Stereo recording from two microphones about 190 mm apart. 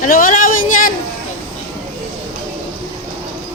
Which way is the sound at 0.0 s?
45° left (ahead or behind).